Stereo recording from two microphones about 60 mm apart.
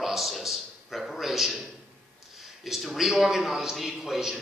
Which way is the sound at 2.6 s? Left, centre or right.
Centre.